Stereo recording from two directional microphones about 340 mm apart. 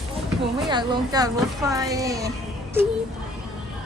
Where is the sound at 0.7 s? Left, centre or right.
Centre.